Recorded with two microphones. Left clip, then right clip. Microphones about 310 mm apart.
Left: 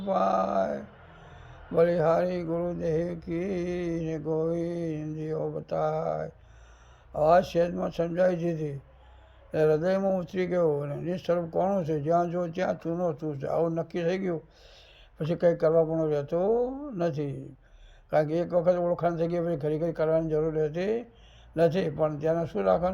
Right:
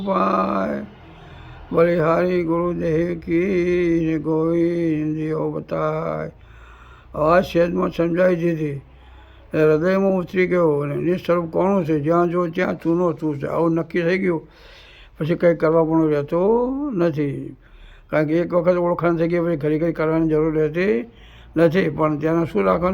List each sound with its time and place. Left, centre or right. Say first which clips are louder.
0.1 s speech: right 6 dB; centre
16.5 s speech: right 7 dB; centre
16.9 s speech: right 9 dB; centre